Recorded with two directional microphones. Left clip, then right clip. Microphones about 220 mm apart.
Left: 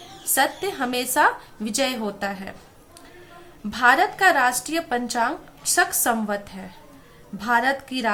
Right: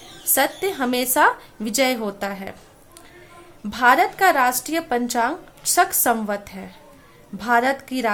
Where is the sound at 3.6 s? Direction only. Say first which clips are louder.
Right 2 dB; 25° right (ahead or behind).